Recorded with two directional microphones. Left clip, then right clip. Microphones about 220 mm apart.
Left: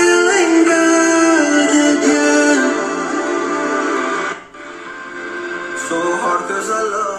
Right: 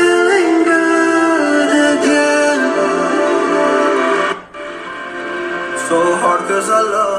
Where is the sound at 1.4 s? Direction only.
25° right (ahead or behind).